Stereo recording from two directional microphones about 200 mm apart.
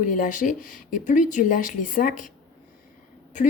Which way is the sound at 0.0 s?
40° left (ahead or behind).